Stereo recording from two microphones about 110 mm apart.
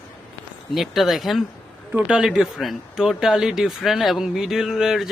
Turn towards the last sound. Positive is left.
turn(degrees=-5)  # may be behind; listen again after turning